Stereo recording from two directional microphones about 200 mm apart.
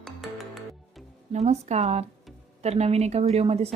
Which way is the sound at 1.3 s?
35° right (ahead or behind).